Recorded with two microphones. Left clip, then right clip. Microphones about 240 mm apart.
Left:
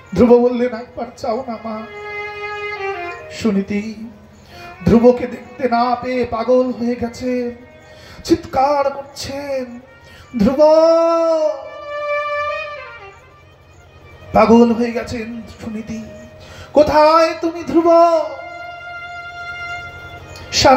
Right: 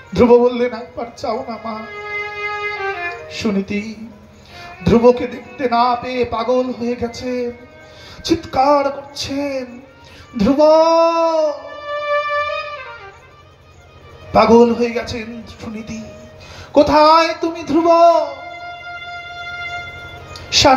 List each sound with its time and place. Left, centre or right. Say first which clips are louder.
0.1 s a man's voice: even; right
10.3 s a man's voice: even; right
12.1 s music: right 2 dB; right
14.3 s a man's voice: right 1 dB; right